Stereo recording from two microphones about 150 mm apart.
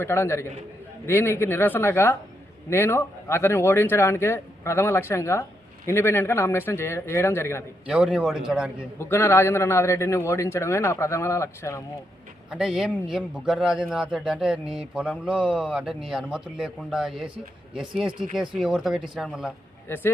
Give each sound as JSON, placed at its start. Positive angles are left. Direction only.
{"t": 0.0, "sound": "a man's voice", "side_deg": 15}
{"t": 7.9, "sound": "a man's voice", "side_deg": -5}
{"t": 9.0, "sound": "a man's voice", "side_deg": 15}
{"t": 12.5, "sound": "a man's voice", "side_deg": -5}
{"t": 19.9, "sound": "a man's voice", "side_deg": 15}